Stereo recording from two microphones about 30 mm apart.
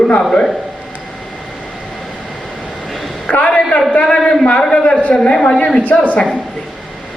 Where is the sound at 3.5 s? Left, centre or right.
Left.